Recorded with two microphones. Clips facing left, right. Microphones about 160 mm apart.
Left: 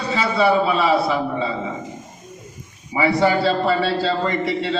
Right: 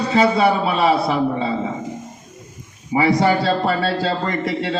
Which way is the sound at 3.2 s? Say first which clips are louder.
Even; 45° right (ahead or behind).